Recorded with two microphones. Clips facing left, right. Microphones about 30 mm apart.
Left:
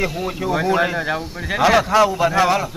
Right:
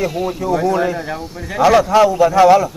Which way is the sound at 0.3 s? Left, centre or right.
Left.